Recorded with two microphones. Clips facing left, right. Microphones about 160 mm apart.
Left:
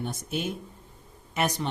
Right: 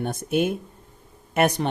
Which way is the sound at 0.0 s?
55° right (ahead or behind).